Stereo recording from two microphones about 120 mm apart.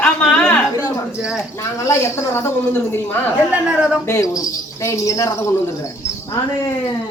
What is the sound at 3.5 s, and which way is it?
Speech, 10° right (ahead or behind).